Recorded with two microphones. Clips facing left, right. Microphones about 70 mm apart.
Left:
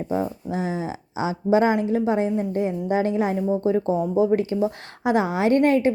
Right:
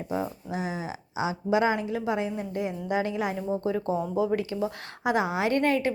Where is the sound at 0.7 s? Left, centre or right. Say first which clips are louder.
Left 6 dB; left.